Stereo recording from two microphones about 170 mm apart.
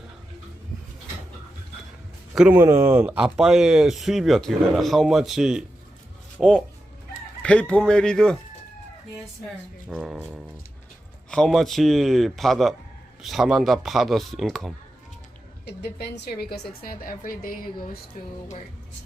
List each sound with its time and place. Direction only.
2.3 s speech: 10° right (ahead or behind)
10.0 s speech: 5° right (ahead or behind)
15.6 s a woman's voice: 80° left; by 18.3 s 50° left (ahead or behind)